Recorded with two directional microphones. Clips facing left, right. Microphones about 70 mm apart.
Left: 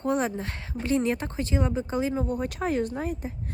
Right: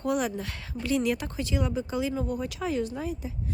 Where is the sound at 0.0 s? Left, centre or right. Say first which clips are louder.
Left 2 dB; left.